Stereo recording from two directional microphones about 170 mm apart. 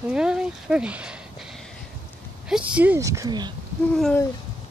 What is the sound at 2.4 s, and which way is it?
Speech, 5° right (ahead or behind).